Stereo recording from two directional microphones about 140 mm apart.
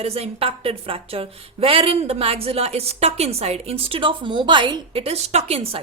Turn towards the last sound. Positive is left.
turn(degrees=-45)  # may be behind; listen again after turning